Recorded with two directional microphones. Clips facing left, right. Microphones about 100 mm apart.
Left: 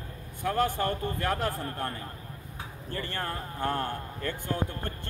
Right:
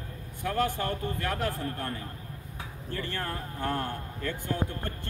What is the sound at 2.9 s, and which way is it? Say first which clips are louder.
Speech: even; 35° left (ahead or behind).